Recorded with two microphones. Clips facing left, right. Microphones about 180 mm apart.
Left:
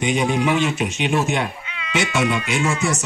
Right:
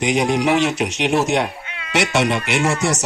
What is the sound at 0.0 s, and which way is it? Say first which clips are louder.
A man's voice: right 2 dB; 80° right.